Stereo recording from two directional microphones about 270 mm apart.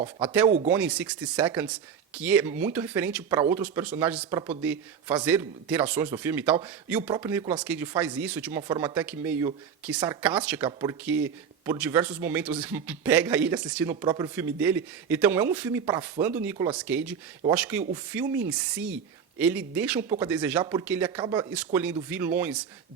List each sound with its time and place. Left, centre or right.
0.0 s speech: centre